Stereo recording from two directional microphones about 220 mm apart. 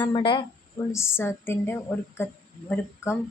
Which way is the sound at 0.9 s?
10° left (ahead or behind).